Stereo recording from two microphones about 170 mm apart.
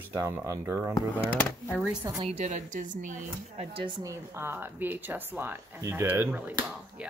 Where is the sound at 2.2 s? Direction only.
40° right (ahead or behind).